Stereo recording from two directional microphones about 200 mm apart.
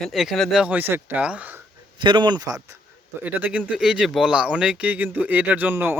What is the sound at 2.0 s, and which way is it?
A man's voice, 20° right (ahead or behind).